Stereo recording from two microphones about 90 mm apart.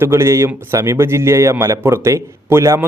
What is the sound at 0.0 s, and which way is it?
A man's voice, 30° right (ahead or behind).